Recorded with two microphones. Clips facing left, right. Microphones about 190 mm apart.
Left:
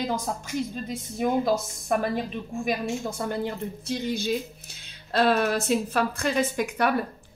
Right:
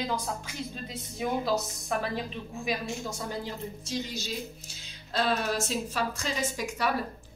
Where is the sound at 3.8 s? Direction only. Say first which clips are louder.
Left 8 dB; 55° left (ahead or behind).